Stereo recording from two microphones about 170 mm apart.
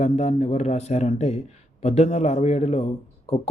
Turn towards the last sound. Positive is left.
turn(degrees=40)  # may be behind; listen again after turning